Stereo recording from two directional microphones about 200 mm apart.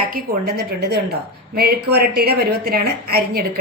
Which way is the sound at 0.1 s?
50° right (ahead or behind).